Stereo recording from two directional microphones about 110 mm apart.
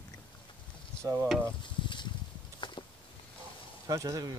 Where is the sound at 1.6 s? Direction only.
45° left (ahead or behind).